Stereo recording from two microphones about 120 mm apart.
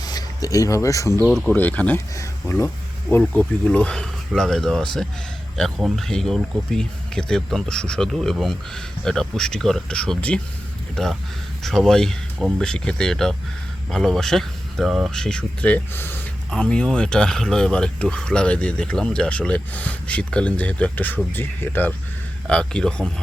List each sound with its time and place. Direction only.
0.0 s speech: 35° left (ahead or behind)
1.2 s speech: centre (ahead or behind)
1.5 s speech: 10° left (ahead or behind)